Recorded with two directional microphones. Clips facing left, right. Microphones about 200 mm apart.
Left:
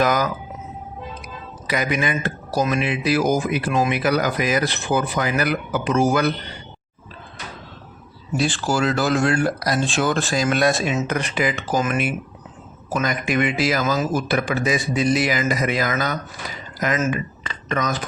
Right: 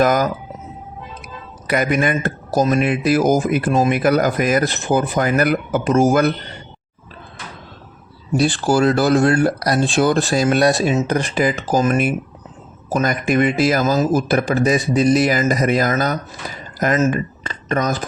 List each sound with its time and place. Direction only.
0.0 s speech: 45° right (ahead or behind)
1.6 s speech: 50° right (ahead or behind)
8.7 s speech: 40° right (ahead or behind)